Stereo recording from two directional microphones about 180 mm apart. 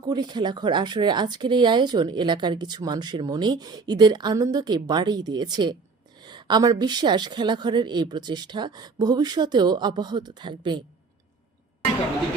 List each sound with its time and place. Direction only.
0.0 s speech: 25° right (ahead or behind)